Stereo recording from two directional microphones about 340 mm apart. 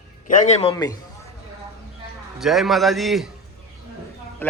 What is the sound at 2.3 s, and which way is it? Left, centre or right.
Speech, centre.